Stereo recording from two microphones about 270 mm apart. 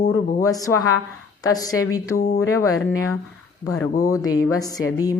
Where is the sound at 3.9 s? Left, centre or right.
Centre.